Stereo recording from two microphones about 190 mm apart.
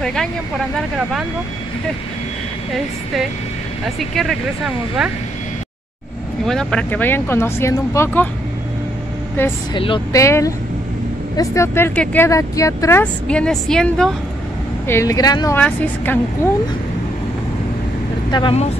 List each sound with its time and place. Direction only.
0.0 s speech: 5° left (ahead or behind)
3.8 s speech: centre (ahead or behind)
6.4 s speech: centre (ahead or behind)
9.4 s speech: 10° left (ahead or behind)
9.8 s speech: 25° left (ahead or behind)
10.1 s speech: 15° left (ahead or behind)
14.9 s speech: 15° left (ahead or behind)
18.3 s speech: 30° left (ahead or behind)